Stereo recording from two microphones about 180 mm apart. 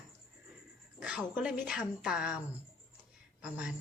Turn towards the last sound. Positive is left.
turn(degrees=-5)  # may be behind; listen again after turning